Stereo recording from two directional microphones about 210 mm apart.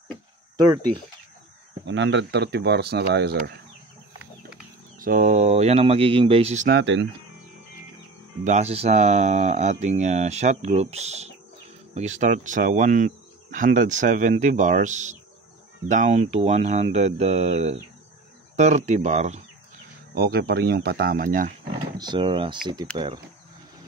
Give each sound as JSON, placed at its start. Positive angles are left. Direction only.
{"t": 0.6, "sound": "speech", "side_deg": -20}
{"t": 1.9, "sound": "speech", "side_deg": -60}
{"t": 4.9, "sound": "speech", "side_deg": -40}
{"t": 6.7, "sound": "speech", "side_deg": -60}
{"t": 8.5, "sound": "speech", "side_deg": -30}
{"t": 20.2, "sound": "speech", "side_deg": -45}
{"t": 21.7, "sound": "speech", "side_deg": -20}